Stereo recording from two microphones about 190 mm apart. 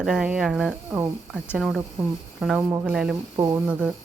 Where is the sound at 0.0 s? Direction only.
5° right (ahead or behind).